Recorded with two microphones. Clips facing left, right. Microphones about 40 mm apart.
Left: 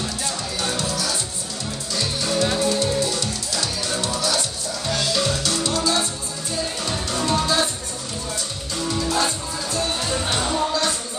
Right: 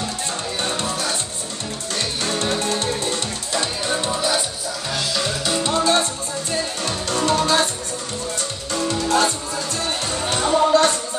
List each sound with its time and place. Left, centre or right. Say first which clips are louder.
0.6 s music: right 1 dB; right
4.9 s music: left 1 dB; centre
5.4 s music: right 2 dB; right
5.7 s music: right 5 dB; right
7.1 s music: right 3 dB; right
8.8 s music: right 3 dB; right
10.3 s music: right 9 dB; right